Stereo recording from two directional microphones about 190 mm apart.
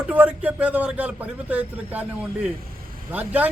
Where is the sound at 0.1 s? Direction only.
10° right (ahead or behind).